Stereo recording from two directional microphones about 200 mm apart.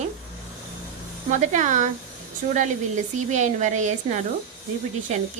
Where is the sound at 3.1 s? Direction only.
35° right (ahead or behind).